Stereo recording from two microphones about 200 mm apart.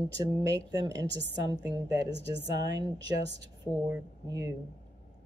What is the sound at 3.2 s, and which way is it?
Speech, 60° right (ahead or behind).